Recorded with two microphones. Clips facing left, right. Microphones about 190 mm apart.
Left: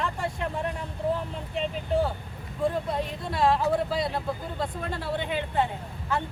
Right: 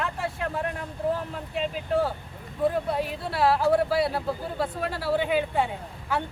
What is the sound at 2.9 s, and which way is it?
Speech, 5° right (ahead or behind).